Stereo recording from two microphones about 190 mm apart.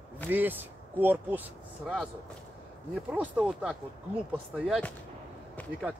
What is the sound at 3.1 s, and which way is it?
Speech, 5° right (ahead or behind).